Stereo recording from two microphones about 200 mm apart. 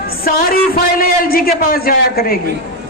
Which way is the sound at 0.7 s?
50° left (ahead or behind).